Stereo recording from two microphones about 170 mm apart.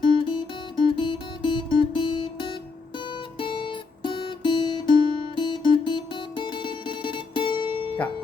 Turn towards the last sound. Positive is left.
turn(degrees=30)  # may be behind; listen again after turning